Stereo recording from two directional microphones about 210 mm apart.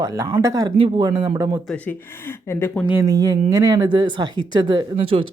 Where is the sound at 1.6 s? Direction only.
5° left (ahead or behind).